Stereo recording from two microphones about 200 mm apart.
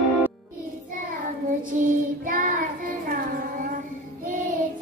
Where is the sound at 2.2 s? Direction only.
40° right (ahead or behind).